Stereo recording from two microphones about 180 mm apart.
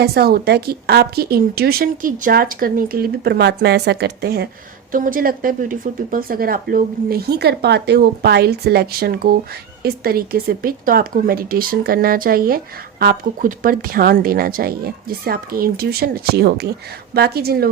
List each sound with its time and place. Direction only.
0.0 s speech: 60° right (ahead or behind)
4.9 s speech: 50° right (ahead or behind)